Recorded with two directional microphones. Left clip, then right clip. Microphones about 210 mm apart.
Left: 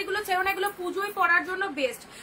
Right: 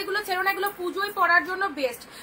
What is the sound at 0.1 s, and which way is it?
A woman's voice, 15° left (ahead or behind).